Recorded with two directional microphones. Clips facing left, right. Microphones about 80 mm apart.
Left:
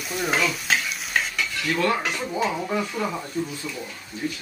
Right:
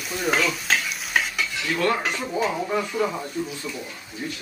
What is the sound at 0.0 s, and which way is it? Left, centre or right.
Stir, centre.